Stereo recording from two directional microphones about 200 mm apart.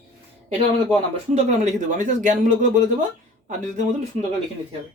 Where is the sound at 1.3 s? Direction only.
35° right (ahead or behind).